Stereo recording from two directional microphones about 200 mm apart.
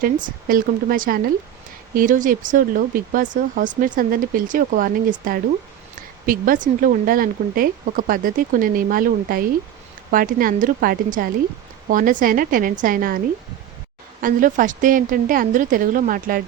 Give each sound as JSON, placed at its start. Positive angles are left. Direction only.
{"t": 0.0, "sound": "speech", "side_deg": -45}